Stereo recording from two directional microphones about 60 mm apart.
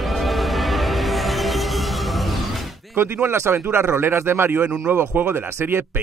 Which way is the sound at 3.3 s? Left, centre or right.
Right.